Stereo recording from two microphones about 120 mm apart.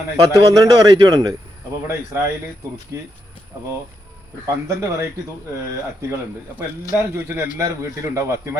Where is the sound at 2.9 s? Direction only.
20° right (ahead or behind).